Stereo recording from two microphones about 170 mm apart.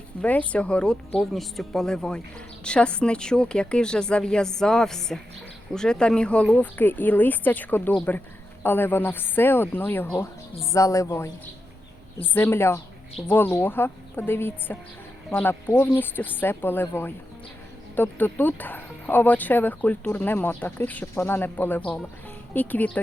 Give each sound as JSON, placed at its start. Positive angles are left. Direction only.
{"t": 0.2, "sound": "a woman's voice", "side_deg": 5}
{"t": 12.3, "sound": "speech", "side_deg": 15}